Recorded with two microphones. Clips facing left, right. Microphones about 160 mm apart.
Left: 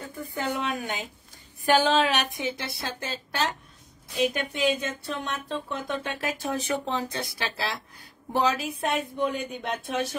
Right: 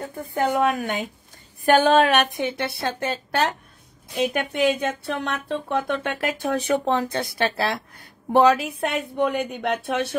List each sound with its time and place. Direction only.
0.2 s speech: 55° right (ahead or behind)
1.6 s speech: 55° right (ahead or behind)